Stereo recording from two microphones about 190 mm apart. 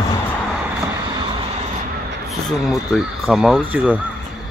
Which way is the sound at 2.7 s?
Centre (ahead or behind).